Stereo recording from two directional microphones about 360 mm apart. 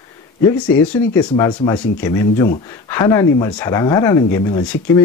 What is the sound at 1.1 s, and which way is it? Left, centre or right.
Speech, centre.